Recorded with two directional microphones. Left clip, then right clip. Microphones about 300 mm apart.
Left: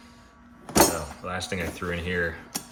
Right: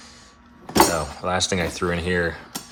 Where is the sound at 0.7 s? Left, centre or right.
Centre.